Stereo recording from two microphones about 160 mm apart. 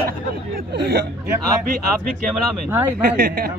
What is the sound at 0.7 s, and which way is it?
Speech, 90° right.